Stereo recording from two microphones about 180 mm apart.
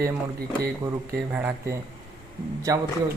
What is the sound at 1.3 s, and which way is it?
A man's voice, 10° right (ahead or behind).